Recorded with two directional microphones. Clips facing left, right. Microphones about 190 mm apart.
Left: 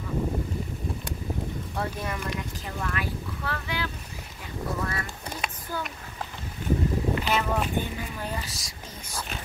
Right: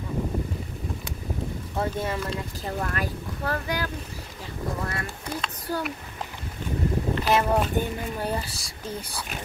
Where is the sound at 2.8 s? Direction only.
40° right (ahead or behind).